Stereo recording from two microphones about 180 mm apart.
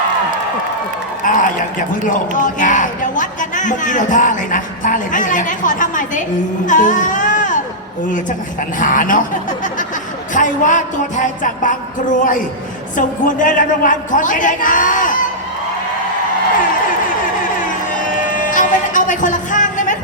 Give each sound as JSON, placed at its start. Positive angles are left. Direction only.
{"t": 1.2, "sound": "a sound", "side_deg": 50}
{"t": 2.0, "sound": "speech", "side_deg": 45}
{"t": 6.7, "sound": "music", "side_deg": 45}
{"t": 8.8, "sound": "speech", "side_deg": 50}
{"t": 10.3, "sound": "speech", "side_deg": 45}
{"t": 18.3, "sound": "music", "side_deg": 45}